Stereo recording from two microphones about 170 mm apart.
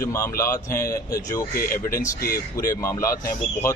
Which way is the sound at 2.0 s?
60° left (ahead or behind).